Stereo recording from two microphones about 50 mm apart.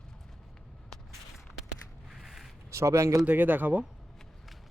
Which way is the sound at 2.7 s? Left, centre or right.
Right.